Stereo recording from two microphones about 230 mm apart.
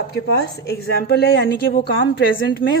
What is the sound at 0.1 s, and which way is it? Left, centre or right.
A woman's voice, left.